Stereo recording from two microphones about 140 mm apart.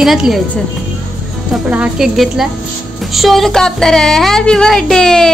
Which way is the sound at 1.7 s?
5° right (ahead or behind).